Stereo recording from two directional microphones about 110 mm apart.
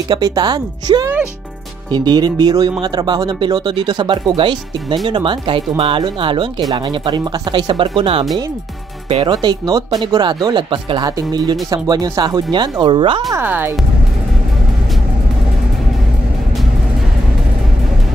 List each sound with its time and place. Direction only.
0.1 s speech: 40° right (ahead or behind); by 8.3 s 55° right (ahead or behind)
9.3 s speech: 40° right (ahead or behind)
11.1 s speech: 35° right (ahead or behind)
13.4 s speech: 15° right (ahead or behind)